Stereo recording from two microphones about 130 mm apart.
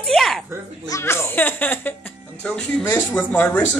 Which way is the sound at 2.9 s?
10° left (ahead or behind).